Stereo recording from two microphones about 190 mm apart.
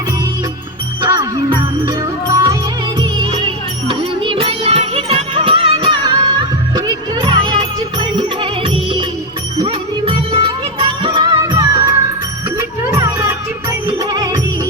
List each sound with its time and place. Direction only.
1.0 s music: 20° right (ahead or behind)
3.0 s music: 25° right (ahead or behind)